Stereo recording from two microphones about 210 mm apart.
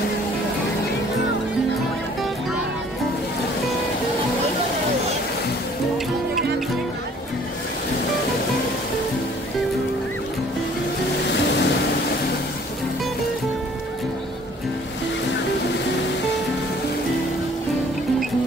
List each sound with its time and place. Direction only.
11.2 s vehicle: 55° left (ahead or behind)